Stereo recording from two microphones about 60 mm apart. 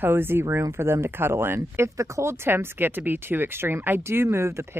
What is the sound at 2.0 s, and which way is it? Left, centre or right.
Speech, right.